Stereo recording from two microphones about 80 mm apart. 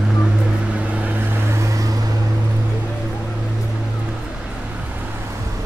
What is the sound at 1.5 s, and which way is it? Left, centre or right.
Vehicle, right.